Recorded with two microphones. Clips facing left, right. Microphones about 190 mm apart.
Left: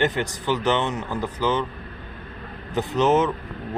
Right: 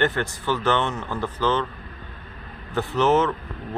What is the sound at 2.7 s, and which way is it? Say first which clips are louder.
Speech: even; 15° left (ahead or behind).